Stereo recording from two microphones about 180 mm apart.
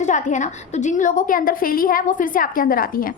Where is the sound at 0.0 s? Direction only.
45° left (ahead or behind).